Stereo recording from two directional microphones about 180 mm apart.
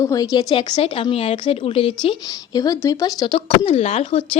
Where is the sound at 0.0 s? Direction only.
20° left (ahead or behind).